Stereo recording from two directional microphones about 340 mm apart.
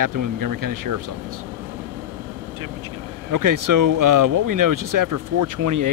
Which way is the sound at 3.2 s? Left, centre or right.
Right.